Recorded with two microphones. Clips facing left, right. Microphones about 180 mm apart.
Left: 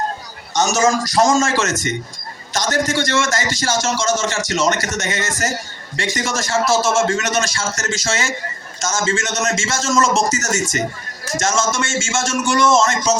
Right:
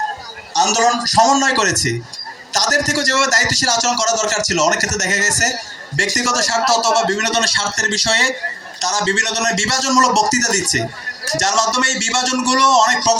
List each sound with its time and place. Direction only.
0.5 s a man's voice: 40° right (ahead or behind)